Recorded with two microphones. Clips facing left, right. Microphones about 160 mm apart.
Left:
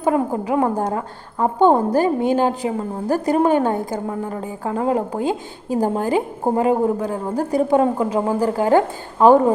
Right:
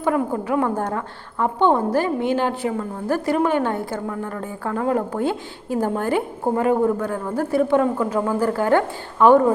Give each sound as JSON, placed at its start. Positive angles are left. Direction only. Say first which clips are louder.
{"t": 0.0, "sound": "a woman's voice", "louder": "left 2 dB", "side_deg": 20}
{"t": 1.4, "sound": "a woman's voice", "louder": "left 3 dB", "side_deg": 40}
{"t": 2.6, "sound": "a woman's voice", "louder": "left 2 dB", "side_deg": 20}
{"t": 3.3, "sound": "a woman's voice", "louder": "left 4 dB", "side_deg": 35}
{"t": 3.7, "sound": "a woman's voice", "louder": "left 3 dB", "side_deg": 20}
{"t": 9.1, "sound": "a woman's voice", "louder": "left 1 dB", "side_deg": 35}